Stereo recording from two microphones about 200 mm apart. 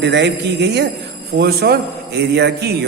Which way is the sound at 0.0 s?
60° right (ahead or behind).